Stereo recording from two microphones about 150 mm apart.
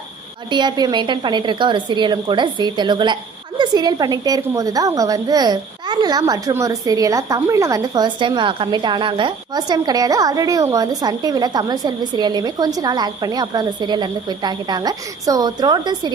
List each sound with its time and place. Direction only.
0.5 s a woman's voice: 30° right (ahead or behind)